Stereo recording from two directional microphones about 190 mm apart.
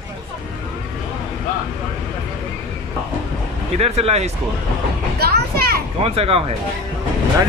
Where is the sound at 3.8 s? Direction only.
35° right (ahead or behind).